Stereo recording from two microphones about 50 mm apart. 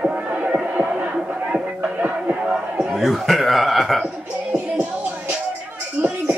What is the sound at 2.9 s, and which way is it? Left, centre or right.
Chuckle, centre.